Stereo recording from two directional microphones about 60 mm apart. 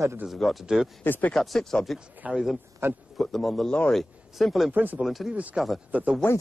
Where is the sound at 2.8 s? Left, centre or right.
Right.